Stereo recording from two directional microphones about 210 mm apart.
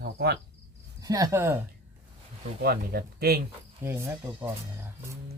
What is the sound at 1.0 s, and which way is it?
Speech, 15° right (ahead or behind).